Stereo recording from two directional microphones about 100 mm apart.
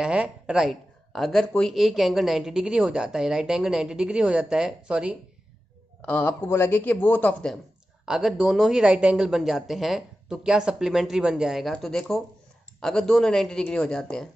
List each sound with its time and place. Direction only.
0.0 s speech: 10° right (ahead or behind)
6.0 s speech: 20° left (ahead or behind)
8.0 s speech: 5° right (ahead or behind)